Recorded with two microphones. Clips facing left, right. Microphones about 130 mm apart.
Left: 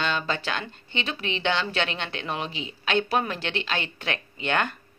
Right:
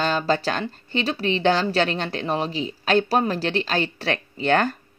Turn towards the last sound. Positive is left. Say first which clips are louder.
# right 6 dB
turn(degrees=-35)  # may be behind; listen again after turning